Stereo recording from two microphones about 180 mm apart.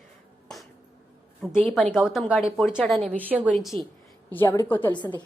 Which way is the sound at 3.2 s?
10° right (ahead or behind).